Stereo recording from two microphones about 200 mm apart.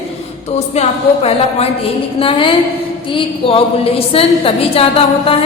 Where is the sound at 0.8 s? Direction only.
35° left (ahead or behind).